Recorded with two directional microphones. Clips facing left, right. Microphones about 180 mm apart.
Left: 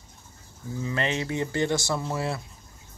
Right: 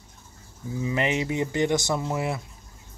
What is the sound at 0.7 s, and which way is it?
Speech, 15° right (ahead or behind).